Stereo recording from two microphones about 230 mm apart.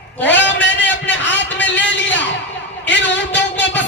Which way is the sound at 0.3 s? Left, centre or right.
Left.